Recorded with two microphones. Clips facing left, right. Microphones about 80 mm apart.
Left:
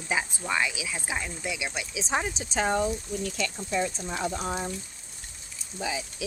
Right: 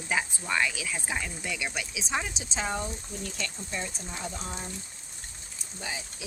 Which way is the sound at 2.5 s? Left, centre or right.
Left.